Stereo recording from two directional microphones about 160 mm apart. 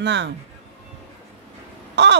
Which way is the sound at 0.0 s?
90° right.